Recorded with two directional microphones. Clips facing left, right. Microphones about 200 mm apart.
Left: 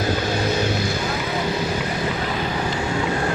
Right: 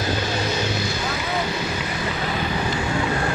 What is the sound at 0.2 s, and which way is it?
Vehicle, 55° left (ahead or behind).